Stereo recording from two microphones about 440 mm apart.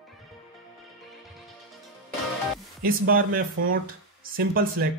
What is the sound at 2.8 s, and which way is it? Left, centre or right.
Speech, centre.